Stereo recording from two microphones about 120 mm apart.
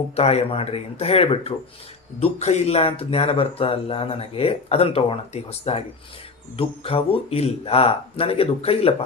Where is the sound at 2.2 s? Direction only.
65° left (ahead or behind).